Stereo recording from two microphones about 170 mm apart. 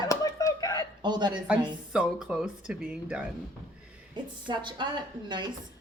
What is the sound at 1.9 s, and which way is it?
Speech, 5° right (ahead or behind).